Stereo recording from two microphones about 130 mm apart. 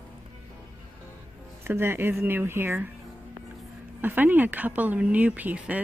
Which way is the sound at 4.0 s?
15° right (ahead or behind).